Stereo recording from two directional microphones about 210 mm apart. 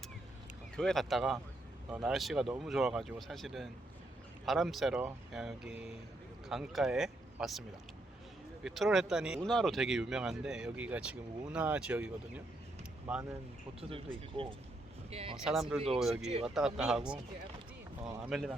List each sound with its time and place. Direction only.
0.8 s speech: centre (ahead or behind)
8.6 s speech: centre (ahead or behind)
14.4 s speech: 25° right (ahead or behind)
15.4 s speech: centre (ahead or behind)
18.3 s speech: centre (ahead or behind)